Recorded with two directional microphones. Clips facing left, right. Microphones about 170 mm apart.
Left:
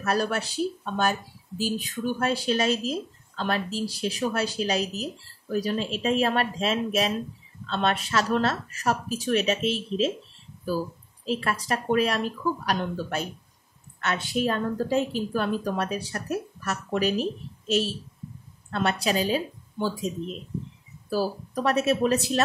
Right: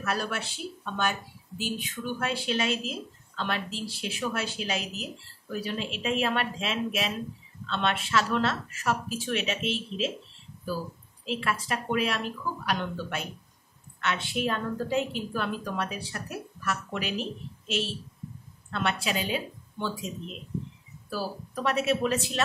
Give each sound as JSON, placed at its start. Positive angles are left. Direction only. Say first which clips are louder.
{"t": 0.0, "sound": "speech", "louder": "left 5 dB", "side_deg": 40}
{"t": 11.2, "sound": "a woman's voice", "louder": "left 3 dB", "side_deg": 40}
{"t": 21.1, "sound": "speech", "louder": "left 7 dB", "side_deg": 40}